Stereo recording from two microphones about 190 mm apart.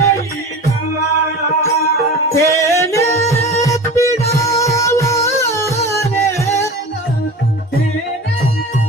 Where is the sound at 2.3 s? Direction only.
15° left (ahead or behind).